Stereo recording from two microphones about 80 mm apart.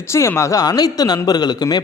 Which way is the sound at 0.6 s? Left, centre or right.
Left.